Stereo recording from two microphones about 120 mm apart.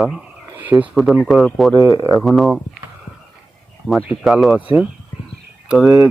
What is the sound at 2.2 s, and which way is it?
Speech, centre (ahead or behind).